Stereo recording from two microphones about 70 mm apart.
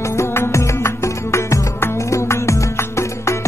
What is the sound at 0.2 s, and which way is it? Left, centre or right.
Music, left.